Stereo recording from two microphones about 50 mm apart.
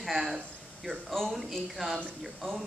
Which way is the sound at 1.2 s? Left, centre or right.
Centre.